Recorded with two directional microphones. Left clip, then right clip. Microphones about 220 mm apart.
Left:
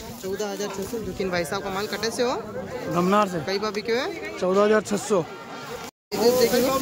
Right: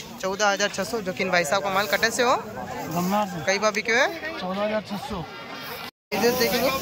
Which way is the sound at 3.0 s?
15° left (ahead or behind).